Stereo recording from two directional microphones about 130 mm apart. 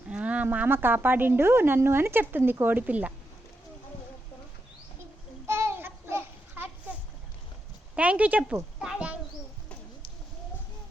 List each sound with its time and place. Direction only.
0.1 s a woman's voice: 10° right (ahead or behind)
5.5 s babbling: 20° right (ahead or behind)
7.9 s a child's voice: 10° right (ahead or behind)